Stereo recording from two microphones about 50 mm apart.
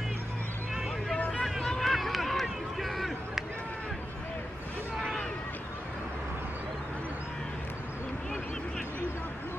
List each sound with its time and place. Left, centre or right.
1.1 s vehicle: left
1.6 s run: centre